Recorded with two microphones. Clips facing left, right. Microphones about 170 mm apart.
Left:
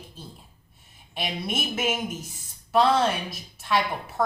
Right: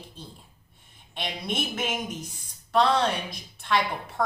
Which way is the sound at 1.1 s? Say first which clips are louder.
Left 1 dB; 5° left (ahead or behind).